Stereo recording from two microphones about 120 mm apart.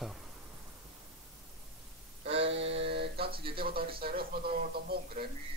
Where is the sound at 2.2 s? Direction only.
55° right (ahead or behind).